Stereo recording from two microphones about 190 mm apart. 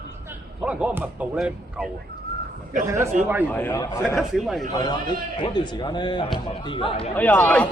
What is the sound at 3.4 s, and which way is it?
Speech, 10° left (ahead or behind).